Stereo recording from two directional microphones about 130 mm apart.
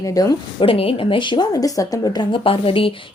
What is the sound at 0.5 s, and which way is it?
Speech, 45° left (ahead or behind).